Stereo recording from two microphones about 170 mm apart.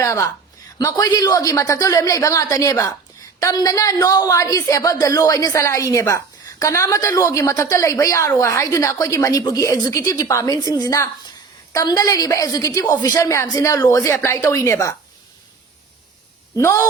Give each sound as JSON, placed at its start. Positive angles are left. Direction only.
{"t": 0.0, "sound": "a woman's voice", "side_deg": 20}
{"t": 16.6, "sound": "a woman's voice", "side_deg": 15}